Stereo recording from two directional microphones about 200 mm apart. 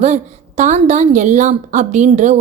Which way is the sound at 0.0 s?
35° right (ahead or behind).